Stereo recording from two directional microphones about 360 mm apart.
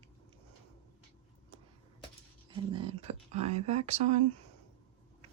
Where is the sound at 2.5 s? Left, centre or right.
Centre.